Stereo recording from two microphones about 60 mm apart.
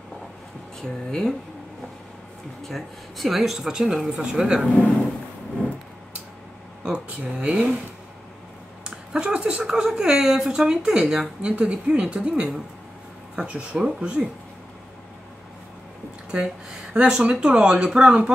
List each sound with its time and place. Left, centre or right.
0.7 s speech: centre
2.7 s speech: centre
4.6 s speech: centre
6.8 s speech: centre
8.9 s speech: centre
16.9 s speech: centre